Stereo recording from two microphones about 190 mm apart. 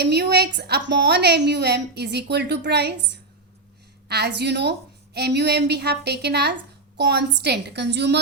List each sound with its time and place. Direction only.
0.0 s a woman's voice: 60° right (ahead or behind)